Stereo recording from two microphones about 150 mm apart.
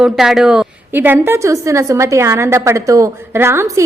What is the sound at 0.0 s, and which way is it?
A woman's voice, 5° right (ahead or behind).